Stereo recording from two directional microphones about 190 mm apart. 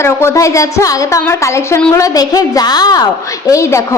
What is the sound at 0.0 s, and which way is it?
A woman's voice, 15° left (ahead or behind).